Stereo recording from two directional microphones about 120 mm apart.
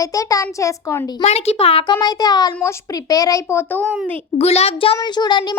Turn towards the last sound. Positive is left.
turn(degrees=35)  # may be behind; listen again after turning